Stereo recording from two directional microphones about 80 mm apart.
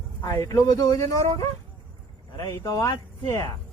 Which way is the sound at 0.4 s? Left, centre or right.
Left.